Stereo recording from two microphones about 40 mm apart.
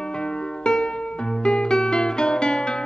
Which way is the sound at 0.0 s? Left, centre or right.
Left.